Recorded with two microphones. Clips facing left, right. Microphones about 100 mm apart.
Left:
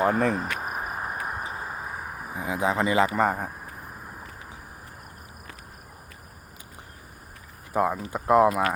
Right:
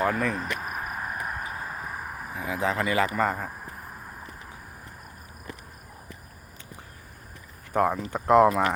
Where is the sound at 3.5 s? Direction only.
Centre (ahead or behind).